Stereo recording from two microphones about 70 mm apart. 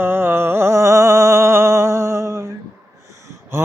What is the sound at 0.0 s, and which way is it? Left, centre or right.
Music, right.